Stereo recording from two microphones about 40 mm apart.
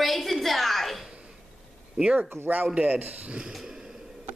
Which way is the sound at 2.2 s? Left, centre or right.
Right.